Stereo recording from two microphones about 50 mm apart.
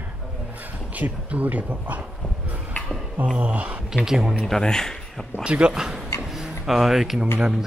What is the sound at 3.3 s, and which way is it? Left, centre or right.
Speech, right.